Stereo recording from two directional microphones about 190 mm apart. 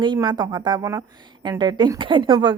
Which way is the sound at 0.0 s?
25° right (ahead or behind).